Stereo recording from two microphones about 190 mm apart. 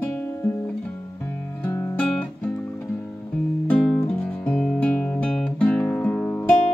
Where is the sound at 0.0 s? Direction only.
10° left (ahead or behind).